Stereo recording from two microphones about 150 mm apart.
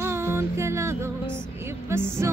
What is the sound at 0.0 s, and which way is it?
Music, 15° right (ahead or behind).